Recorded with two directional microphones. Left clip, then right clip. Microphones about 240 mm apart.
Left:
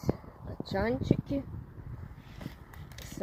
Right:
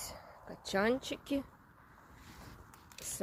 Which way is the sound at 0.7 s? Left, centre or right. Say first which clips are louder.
Left 2 dB; centre.